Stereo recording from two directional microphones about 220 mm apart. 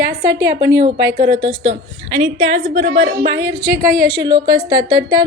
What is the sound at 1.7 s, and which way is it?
Speech, 55° right (ahead or behind).